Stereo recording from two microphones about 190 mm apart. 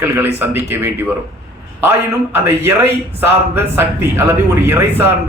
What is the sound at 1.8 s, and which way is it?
A man's voice, 10° right (ahead or behind).